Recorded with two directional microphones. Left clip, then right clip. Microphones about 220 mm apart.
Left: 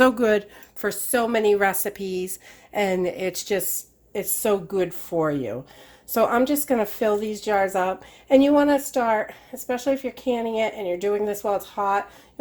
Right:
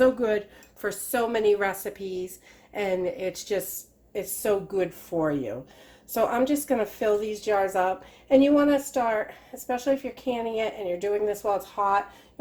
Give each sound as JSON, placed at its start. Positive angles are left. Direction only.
{"t": 0.0, "sound": "a woman's voice", "side_deg": 50}